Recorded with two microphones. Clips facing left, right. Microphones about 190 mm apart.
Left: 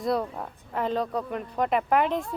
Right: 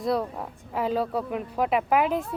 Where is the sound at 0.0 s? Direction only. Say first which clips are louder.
Right 1 dB; centre (ahead or behind).